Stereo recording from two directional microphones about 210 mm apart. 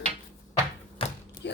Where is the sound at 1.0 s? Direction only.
25° left (ahead or behind).